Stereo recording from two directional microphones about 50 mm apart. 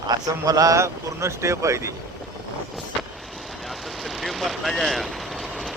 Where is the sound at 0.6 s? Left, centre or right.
Right.